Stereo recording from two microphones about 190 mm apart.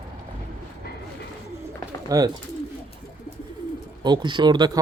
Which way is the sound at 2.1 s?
20° right (ahead or behind).